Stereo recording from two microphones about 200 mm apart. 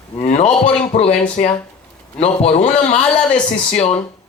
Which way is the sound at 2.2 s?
30° left (ahead or behind).